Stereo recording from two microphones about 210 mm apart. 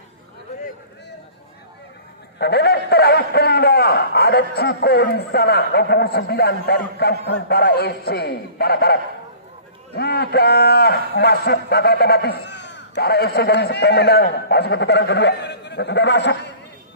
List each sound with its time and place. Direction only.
2.3 s a man's voice: 50° left (ahead or behind)